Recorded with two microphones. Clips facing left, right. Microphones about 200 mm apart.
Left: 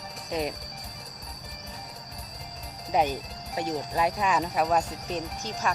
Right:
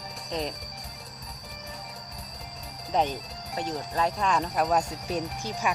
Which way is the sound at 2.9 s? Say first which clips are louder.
Left 1 dB; 10° left (ahead or behind).